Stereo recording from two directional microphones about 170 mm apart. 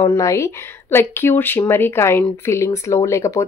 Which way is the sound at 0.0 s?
20° left (ahead or behind).